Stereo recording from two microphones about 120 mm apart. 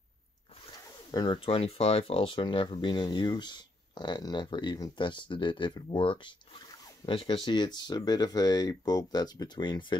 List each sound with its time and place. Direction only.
1.1 s speech: 40° left (ahead or behind)
5.9 s speech: 45° left (ahead or behind)